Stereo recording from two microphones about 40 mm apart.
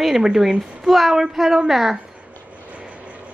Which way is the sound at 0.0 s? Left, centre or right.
Centre.